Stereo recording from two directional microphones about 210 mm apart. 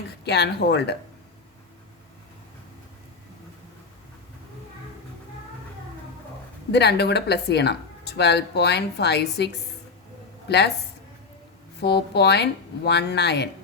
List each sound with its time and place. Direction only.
0.3 s speech: 50° left (ahead or behind)
6.7 s speech: 50° left (ahead or behind)
11.8 s speech: 50° left (ahead or behind)